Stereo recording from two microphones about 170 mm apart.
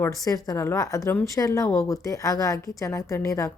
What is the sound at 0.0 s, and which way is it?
Speech, 20° left (ahead or behind).